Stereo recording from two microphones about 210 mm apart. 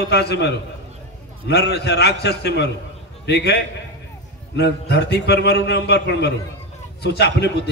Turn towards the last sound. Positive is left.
turn(degrees=55)  # may be behind; listen again after turning